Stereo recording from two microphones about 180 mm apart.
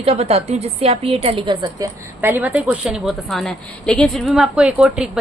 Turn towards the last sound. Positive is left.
turn(degrees=-5)  # may be behind; listen again after turning